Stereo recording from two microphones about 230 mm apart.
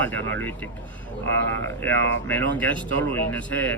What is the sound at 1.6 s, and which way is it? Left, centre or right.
Speech, centre.